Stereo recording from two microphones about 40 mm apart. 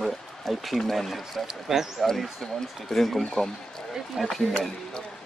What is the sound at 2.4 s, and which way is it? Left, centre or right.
Speech, centre.